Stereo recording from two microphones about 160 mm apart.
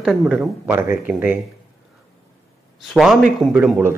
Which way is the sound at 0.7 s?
15° right (ahead or behind).